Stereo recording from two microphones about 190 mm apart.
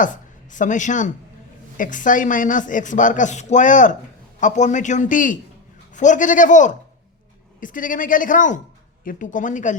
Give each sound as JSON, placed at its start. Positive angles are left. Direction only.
{"t": 0.5, "sound": "a man's voice", "side_deg": 40}